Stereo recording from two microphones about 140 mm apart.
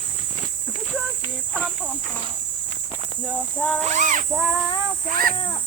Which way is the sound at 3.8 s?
65° right (ahead or behind).